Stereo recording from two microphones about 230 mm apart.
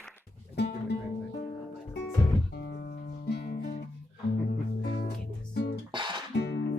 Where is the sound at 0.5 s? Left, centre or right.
Left.